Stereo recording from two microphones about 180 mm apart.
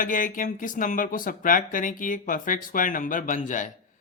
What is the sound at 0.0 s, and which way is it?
Speech, 45° left (ahead or behind).